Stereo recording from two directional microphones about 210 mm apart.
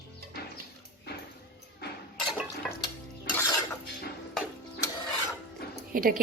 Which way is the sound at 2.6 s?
Centre (ahead or behind).